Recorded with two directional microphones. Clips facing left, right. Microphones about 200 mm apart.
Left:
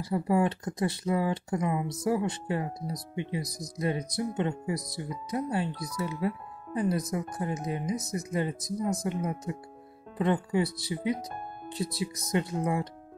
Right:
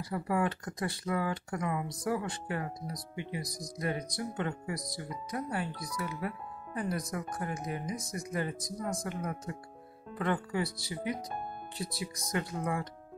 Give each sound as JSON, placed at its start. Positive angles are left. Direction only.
{"t": 0.0, "sound": "speech", "side_deg": 25}